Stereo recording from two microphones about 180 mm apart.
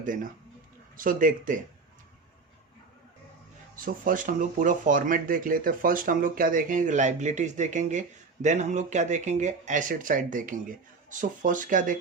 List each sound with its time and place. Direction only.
0.9 s speech: 50° right (ahead or behind)
3.8 s speech: 50° right (ahead or behind)